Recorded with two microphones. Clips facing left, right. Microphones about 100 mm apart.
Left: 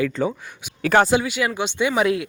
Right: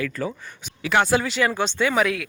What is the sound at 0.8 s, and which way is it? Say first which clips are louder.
Speech: left 4 dB; 45° left (ahead or behind).